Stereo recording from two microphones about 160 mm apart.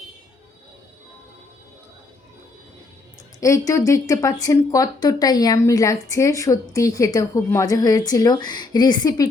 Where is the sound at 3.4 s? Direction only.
20° left (ahead or behind).